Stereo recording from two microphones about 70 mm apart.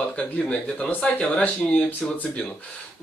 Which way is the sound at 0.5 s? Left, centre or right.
Centre.